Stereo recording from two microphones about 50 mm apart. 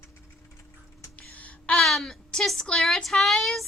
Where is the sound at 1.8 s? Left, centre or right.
Centre.